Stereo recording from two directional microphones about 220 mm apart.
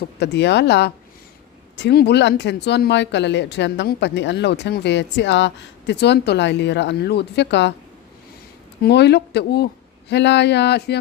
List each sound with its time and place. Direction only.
0.2 s speech: 50° left (ahead or behind)
8.8 s speech: 50° left (ahead or behind)